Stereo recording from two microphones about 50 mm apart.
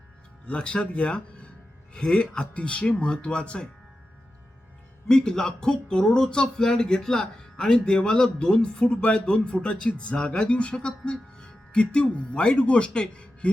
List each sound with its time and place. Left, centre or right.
0.4 s speech: left
5.0 s speech: centre